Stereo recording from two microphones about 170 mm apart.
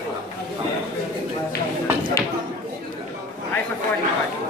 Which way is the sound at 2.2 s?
20° left (ahead or behind).